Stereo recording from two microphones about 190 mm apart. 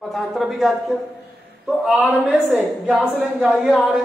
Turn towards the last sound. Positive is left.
turn(degrees=0)  # may be behind; listen again after turning